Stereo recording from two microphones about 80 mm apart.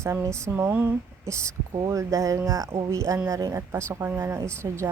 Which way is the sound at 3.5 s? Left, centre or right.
Right.